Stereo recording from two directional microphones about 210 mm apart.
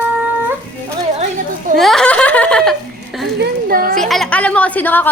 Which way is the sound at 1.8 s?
Centre (ahead or behind).